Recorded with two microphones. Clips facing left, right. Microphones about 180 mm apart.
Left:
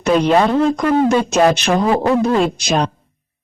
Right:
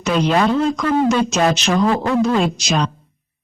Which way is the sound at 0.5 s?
55° left (ahead or behind).